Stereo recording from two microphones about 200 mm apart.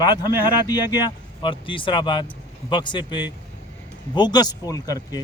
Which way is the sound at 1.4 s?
25° left (ahead or behind).